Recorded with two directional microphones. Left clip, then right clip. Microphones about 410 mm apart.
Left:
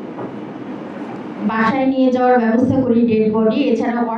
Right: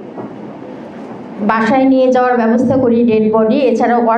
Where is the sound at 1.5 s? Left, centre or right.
Right.